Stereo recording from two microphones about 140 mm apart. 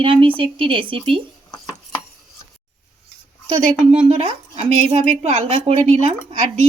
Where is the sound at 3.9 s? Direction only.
45° right (ahead or behind).